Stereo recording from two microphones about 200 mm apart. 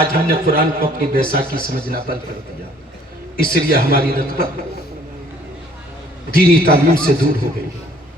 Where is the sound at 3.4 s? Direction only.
50° right (ahead or behind).